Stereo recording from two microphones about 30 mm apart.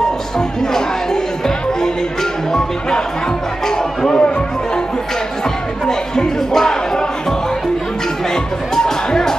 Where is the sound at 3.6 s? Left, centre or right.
Centre.